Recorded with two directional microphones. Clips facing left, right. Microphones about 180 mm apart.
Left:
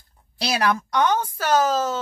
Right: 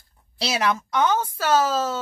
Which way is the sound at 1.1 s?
25° right (ahead or behind).